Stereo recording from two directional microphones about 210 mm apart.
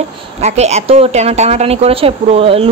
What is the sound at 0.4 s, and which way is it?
A woman's voice, 30° right (ahead or behind).